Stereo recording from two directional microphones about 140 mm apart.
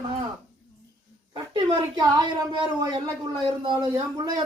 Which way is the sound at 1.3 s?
30° right (ahead or behind).